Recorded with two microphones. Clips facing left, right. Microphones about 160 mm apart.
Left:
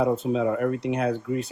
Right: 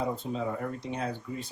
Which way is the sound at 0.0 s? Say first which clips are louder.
Left 9 dB; 80° left.